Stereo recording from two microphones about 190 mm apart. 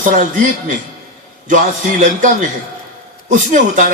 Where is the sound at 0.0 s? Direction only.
45° right (ahead or behind).